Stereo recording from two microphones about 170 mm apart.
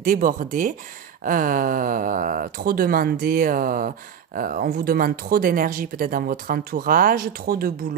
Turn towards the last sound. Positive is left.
turn(degrees=-60)  # may be behind; listen again after turning